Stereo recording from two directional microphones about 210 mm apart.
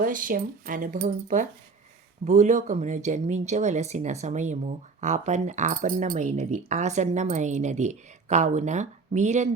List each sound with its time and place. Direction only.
0.0 s speech: 40° right (ahead or behind)